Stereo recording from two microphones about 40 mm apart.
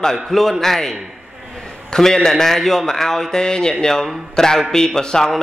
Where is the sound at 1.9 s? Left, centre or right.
Centre.